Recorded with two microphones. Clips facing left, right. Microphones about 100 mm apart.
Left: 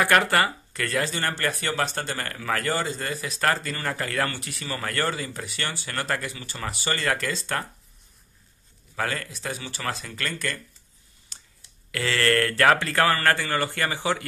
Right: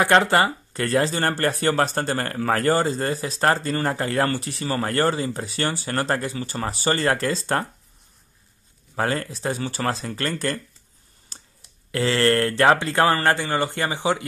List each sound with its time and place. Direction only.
0.0 s speech: 25° right (ahead or behind)
8.9 s speech: 35° right (ahead or behind)
11.3 s a sound: 35° right (ahead or behind)
11.9 s speech: 25° right (ahead or behind)